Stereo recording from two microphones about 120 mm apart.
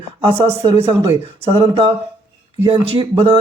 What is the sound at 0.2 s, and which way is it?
Speech, 50° right (ahead or behind).